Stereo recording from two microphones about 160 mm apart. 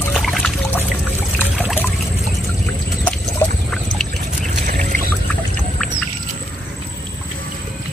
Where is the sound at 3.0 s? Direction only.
5° left (ahead or behind).